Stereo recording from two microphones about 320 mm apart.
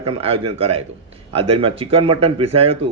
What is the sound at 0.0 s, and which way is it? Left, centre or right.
A man's voice, centre.